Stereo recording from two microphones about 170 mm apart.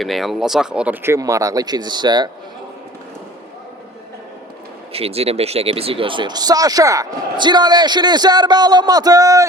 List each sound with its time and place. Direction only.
0.0 s speech: centre (ahead or behind); by 2.3 s 25° right (ahead or behind)
4.9 s speech: 35° right (ahead or behind); by 9.5 s 20° right (ahead or behind)